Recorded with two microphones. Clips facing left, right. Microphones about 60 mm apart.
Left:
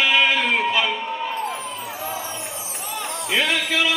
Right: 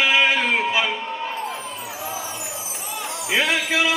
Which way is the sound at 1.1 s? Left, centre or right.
Centre.